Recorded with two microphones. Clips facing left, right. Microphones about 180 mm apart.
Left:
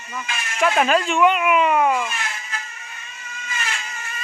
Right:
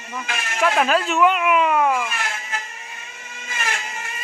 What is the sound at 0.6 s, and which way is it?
Speech, centre (ahead or behind).